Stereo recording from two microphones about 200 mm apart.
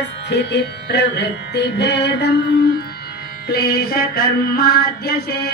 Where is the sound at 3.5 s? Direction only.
50° left (ahead or behind).